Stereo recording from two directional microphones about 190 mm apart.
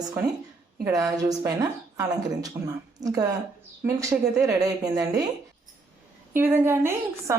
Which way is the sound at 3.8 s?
15° right (ahead or behind).